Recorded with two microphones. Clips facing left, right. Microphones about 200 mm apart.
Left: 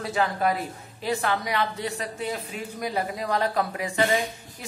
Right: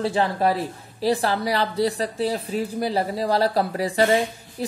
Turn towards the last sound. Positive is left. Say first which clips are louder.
# right 5 dB
turn(degrees=-35)  # may be behind; listen again after turning